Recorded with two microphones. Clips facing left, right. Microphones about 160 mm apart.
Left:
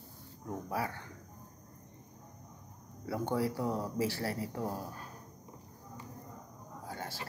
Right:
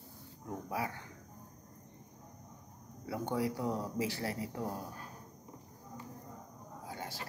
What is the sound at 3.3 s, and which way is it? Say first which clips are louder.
Speech: left 1 dB; 20° right (ahead or behind).